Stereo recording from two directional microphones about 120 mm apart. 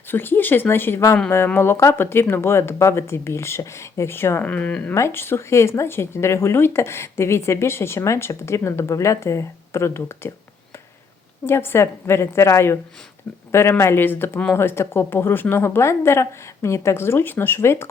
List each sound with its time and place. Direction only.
0.1 s speech: 15° left (ahead or behind)
11.4 s speech: 20° left (ahead or behind)